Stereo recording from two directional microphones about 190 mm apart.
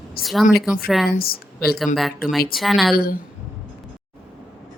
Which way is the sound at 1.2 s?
50° left (ahead or behind).